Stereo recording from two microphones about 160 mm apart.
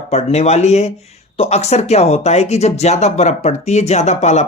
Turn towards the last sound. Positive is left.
turn(degrees=45)  # may be behind; listen again after turning